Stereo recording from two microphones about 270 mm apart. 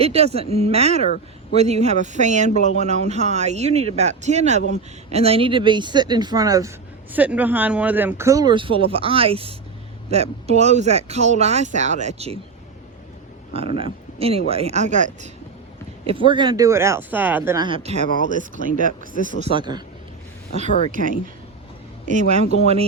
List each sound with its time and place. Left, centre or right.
0.0 s speech: right
13.5 s speech: right
19.1 s speech: left
19.4 s speech: centre
20.9 s speech: right